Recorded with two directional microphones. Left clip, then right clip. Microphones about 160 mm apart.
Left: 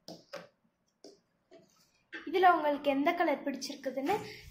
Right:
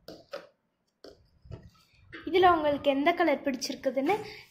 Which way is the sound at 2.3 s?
20° right (ahead or behind).